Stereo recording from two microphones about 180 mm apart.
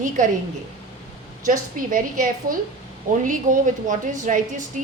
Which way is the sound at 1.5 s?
50° right (ahead or behind).